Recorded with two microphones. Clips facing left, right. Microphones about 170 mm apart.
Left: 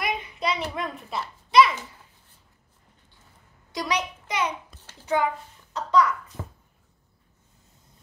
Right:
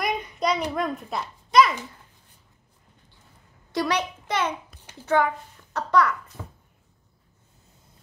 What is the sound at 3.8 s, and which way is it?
Speech, 55° right (ahead or behind).